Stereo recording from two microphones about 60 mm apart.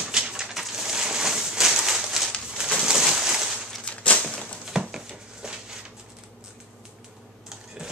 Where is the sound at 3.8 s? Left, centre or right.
Centre.